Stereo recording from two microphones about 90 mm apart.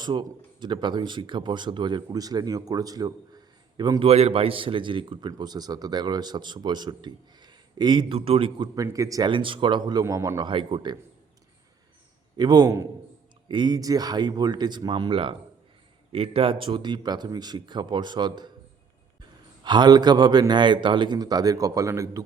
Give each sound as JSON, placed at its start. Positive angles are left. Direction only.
{"t": 0.0, "sound": "a man's voice", "side_deg": -60}
{"t": 2.1, "sound": "a man's voice", "side_deg": -45}
{"t": 4.0, "sound": "a man's voice", "side_deg": -90}
{"t": 8.6, "sound": "speech", "side_deg": -40}
{"t": 9.2, "sound": "a man's voice", "side_deg": -70}
{"t": 10.4, "sound": "a man's voice", "side_deg": -75}
{"t": 12.4, "sound": "speech", "side_deg": -50}
{"t": 16.1, "sound": "a man's voice", "side_deg": -90}
{"t": 19.6, "sound": "a man's voice", "side_deg": -55}